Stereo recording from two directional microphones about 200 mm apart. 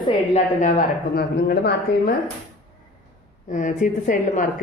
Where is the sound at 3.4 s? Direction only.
40° left (ahead or behind).